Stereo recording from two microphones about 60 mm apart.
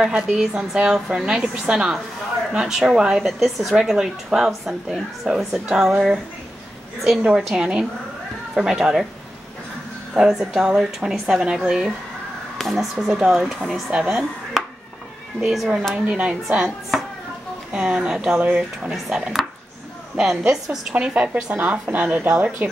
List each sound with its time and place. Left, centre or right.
0.0 s a woman's voice: centre
7.0 s a woman's voice: centre
10.1 s a woman's voice: centre
12.5 s a woman's voice: centre
13.2 s a woman's voice: centre
15.9 s a woman's voice: centre
17.7 s a woman's voice: centre
20.9 s speech: right